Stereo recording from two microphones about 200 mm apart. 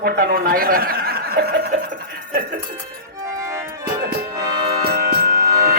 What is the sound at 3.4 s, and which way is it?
Music, 15° right (ahead or behind).